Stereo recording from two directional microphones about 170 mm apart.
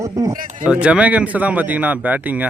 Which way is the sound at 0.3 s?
50° right (ahead or behind).